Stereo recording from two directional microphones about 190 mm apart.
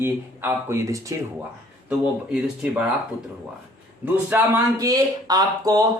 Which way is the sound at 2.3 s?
5° right (ahead or behind).